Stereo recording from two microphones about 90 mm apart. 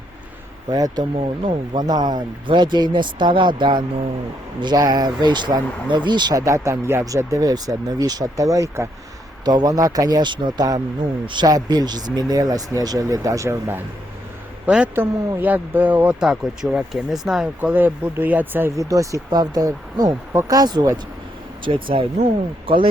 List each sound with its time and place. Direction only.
0.7 s speech: 45° right (ahead or behind)
1.1 s speech: 70° right (ahead or behind)
1.8 s speech: 50° right (ahead or behind)
6.3 s speech: 35° right (ahead or behind)
9.4 s speech: 50° right (ahead or behind); by 13.8 s 30° right (ahead or behind)
14.7 s a man's voice: 15° right (ahead or behind)
16.2 s speech: 5° right (ahead or behind)
17.6 s speech: 20° right (ahead or behind)
18.8 s speech: 35° right (ahead or behind)
21.6 s speech: 65° right (ahead or behind)